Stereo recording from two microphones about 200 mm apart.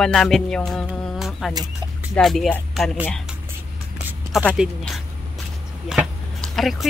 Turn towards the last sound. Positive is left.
turn(degrees=0)  # may be behind; listen again after turning